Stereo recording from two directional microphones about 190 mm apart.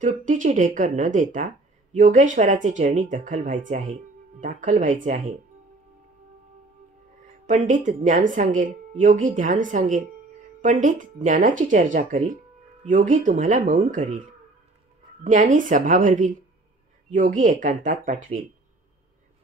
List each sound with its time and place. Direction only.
0.0 s a woman's voice: 40° right (ahead or behind)
7.4 s a woman's voice: 40° right (ahead or behind)
15.2 s a woman's voice: 40° right (ahead or behind)